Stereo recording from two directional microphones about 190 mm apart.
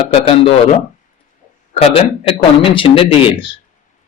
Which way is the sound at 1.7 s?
30° left (ahead or behind).